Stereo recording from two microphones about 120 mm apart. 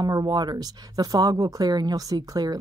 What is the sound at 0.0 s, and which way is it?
Speech, 35° right (ahead or behind).